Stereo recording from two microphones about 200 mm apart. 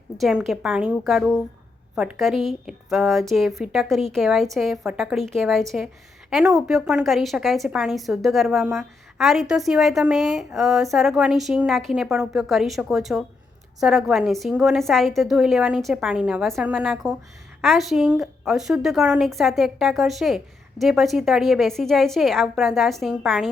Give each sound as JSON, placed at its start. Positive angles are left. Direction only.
{"t": 0.2, "sound": "a woman's voice", "side_deg": 0}